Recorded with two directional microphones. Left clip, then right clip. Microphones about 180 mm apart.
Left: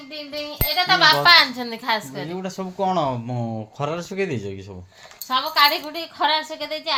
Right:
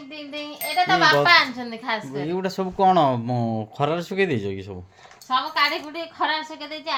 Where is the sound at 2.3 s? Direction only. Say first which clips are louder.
Right 5 dB; 30° right (ahead or behind); by 4.7 s 15° right (ahead or behind).